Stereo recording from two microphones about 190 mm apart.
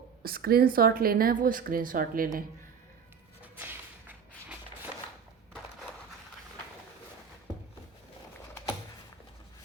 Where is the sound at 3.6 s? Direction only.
10° right (ahead or behind).